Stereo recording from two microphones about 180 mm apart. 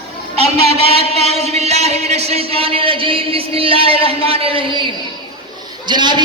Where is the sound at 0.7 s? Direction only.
35° right (ahead or behind).